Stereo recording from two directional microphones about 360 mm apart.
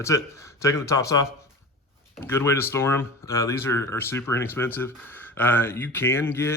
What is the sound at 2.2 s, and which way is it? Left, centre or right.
Speech, centre.